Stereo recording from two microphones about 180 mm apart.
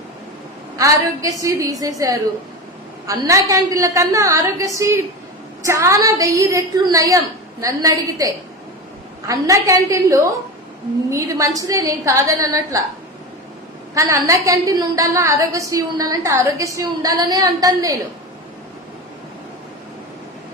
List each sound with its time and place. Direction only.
0.8 s a woman's voice: 20° right (ahead or behind)
13.9 s a woman's voice: 15° right (ahead or behind)